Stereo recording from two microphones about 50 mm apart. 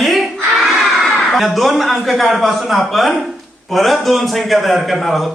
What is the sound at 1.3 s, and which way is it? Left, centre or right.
A man's voice, centre.